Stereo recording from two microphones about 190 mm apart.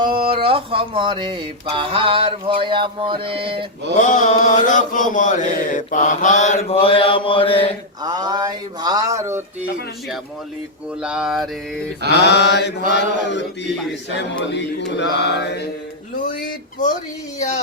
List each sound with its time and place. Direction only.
0.0 s speech: 25° right (ahead or behind)
3.9 s chant: 40° left (ahead or behind)
8.0 s speech: 20° right (ahead or behind)
11.0 s mantra: 5° right (ahead or behind)
12.2 s mantra: 65° left (ahead or behind)